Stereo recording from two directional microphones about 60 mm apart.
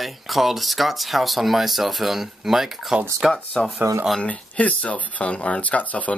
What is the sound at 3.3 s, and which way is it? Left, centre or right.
Speech, centre.